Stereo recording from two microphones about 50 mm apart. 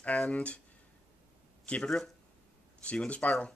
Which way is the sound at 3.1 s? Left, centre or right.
Left.